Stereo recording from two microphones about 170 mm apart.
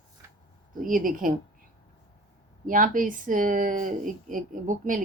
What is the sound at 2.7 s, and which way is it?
Speech, 55° right (ahead or behind).